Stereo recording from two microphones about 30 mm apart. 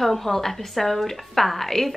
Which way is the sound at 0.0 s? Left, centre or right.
Centre.